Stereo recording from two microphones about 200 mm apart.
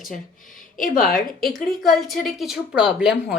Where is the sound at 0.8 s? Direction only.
40° left (ahead or behind).